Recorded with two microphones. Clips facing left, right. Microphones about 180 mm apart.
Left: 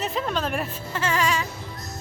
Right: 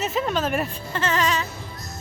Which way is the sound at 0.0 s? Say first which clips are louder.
Right 2 dB; 5° right (ahead or behind).